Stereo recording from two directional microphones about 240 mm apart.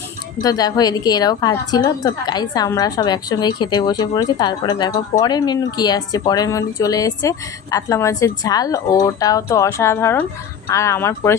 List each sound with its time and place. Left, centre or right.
0.4 s speech: centre